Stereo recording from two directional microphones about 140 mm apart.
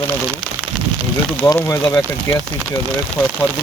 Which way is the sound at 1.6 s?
20° left (ahead or behind).